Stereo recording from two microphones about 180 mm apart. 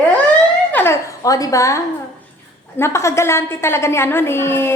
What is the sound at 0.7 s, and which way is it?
A woman's voice, 10° left (ahead or behind).